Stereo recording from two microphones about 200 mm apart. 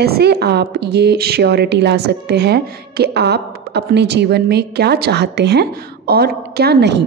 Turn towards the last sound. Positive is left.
turn(degrees=-55)  # may be behind; listen again after turning